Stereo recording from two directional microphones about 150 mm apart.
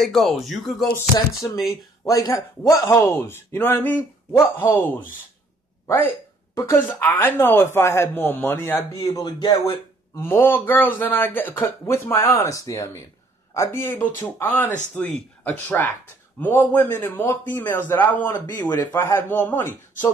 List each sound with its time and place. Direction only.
0.0 s speech: centre (ahead or behind)
0.9 s a man's voice: 20° left (ahead or behind)
9.0 s speech: 25° left (ahead or behind)
10.1 s a man's voice: 15° left (ahead or behind)